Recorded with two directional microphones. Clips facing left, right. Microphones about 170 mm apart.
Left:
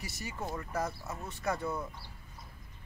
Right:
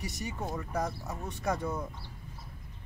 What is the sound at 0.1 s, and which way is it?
A man's voice, 20° right (ahead or behind).